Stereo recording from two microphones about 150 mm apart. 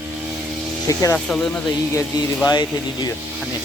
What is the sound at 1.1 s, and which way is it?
Speech, 5° left (ahead or behind).